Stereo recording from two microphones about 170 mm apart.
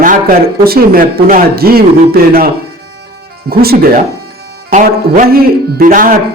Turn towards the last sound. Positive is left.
turn(degrees=-55)  # may be behind; listen again after turning